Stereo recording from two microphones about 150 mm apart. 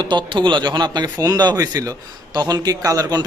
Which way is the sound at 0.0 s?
30° right (ahead or behind).